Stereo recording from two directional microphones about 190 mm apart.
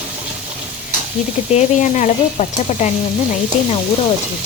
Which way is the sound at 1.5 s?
40° left (ahead or behind).